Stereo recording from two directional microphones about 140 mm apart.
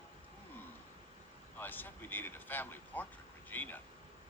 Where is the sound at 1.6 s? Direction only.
15° left (ahead or behind).